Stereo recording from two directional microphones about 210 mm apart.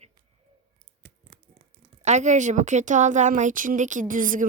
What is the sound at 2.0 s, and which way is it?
Speech, 35° right (ahead or behind).